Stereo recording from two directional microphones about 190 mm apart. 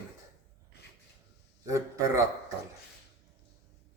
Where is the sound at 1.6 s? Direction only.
15° right (ahead or behind).